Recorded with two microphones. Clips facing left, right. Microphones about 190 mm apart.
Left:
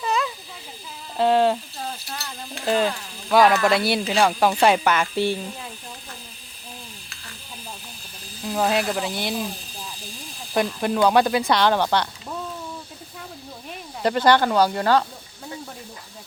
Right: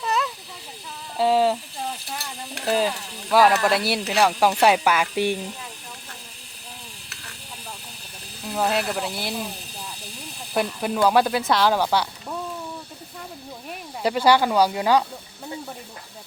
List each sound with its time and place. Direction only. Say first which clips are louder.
0.0 s snake: left 1 dB; centre (ahead or behind)
1.1 s speech: left 1 dB; 5° right (ahead or behind)
2.6 s speech: left 1 dB; 5° right (ahead or behind)
8.4 s speech: left 2 dB; centre (ahead or behind)
10.8 s speech: left 1 dB; 5° right (ahead or behind)
14.0 s speech: left 1 dB; 10° right (ahead or behind)